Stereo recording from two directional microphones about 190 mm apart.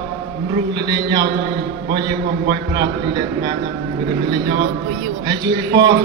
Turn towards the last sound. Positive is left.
turn(degrees=-20)  # may be behind; listen again after turning